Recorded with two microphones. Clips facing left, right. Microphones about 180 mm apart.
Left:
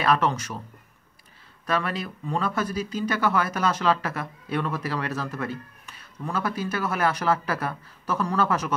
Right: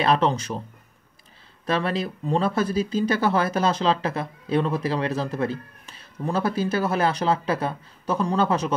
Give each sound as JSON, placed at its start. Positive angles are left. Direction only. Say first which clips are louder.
{"t": 0.0, "sound": "speech", "louder": "right 2 dB", "side_deg": -25}
{"t": 1.7, "sound": "speech", "louder": "right 3 dB", "side_deg": -25}